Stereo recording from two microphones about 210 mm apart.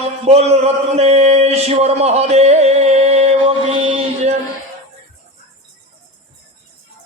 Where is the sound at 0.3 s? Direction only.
30° right (ahead or behind).